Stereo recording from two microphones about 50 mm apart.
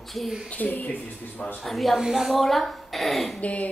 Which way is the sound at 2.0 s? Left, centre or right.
Centre.